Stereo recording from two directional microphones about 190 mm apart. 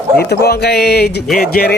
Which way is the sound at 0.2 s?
55° left (ahead or behind).